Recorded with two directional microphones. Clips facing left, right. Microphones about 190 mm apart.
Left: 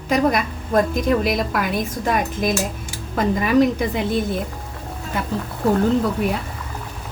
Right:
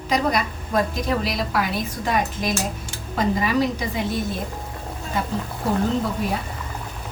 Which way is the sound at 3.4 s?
55° left (ahead or behind).